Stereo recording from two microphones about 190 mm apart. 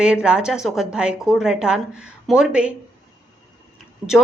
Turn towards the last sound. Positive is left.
turn(degrees=-20)  # may be behind; listen again after turning